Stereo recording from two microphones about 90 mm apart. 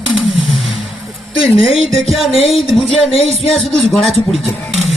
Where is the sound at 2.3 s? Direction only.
90° left.